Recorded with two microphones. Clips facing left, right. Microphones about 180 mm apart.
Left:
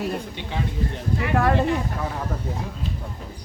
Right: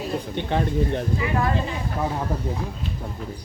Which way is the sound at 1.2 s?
65° left (ahead or behind).